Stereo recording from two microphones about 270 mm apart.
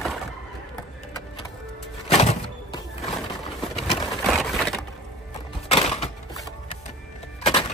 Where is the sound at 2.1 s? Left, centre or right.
Left.